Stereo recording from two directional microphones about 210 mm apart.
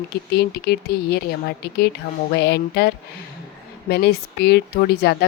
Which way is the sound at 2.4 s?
50° left (ahead or behind).